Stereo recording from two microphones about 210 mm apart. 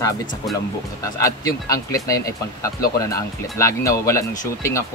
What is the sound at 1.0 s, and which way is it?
Speech, 15° left (ahead or behind).